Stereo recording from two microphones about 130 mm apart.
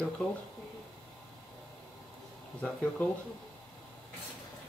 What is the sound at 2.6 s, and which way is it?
Speech, 10° left (ahead or behind).